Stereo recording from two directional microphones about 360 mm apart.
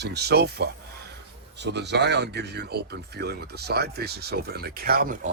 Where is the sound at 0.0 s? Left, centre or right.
Right.